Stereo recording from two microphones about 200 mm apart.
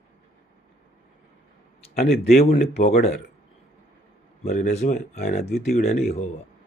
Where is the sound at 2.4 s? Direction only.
35° left (ahead or behind).